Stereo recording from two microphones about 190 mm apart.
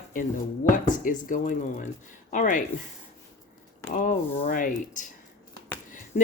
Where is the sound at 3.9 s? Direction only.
40° left (ahead or behind).